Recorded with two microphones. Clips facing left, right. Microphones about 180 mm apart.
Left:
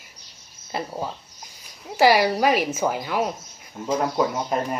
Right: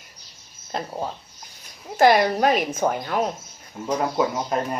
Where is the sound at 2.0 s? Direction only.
5° left (ahead or behind).